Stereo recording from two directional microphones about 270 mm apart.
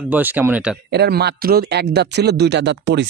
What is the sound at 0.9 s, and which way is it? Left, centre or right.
Speech, right.